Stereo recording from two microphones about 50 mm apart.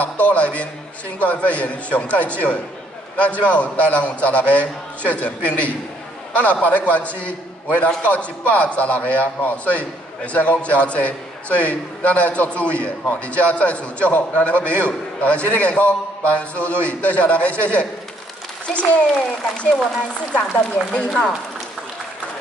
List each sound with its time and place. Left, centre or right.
0.0 s a man's voice: left
3.4 s a man's voice: left